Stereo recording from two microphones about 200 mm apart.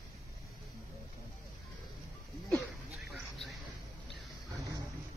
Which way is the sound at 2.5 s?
Centre (ahead or behind).